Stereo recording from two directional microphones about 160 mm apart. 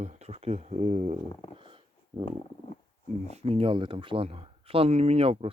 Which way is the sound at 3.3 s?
40° right (ahead or behind).